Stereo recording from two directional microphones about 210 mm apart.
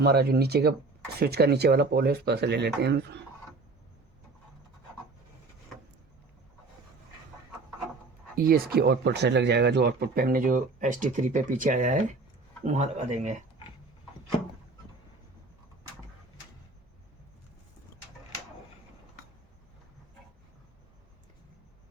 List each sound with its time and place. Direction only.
0.0 s speech: 50° right (ahead or behind)
8.4 s speech: 45° right (ahead or behind)